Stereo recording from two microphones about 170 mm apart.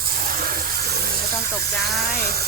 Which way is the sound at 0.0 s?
60° right (ahead or behind).